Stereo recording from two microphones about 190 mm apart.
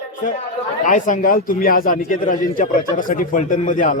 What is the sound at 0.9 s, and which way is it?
A man's voice, 40° left (ahead or behind).